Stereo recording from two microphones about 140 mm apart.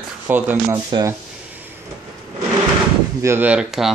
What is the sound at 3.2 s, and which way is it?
Speech, 10° right (ahead or behind).